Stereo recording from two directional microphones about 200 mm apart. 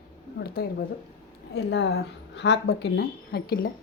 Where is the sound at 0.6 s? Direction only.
50° left (ahead or behind).